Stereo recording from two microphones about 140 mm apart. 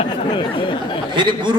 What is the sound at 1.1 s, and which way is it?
Speech, 35° right (ahead or behind).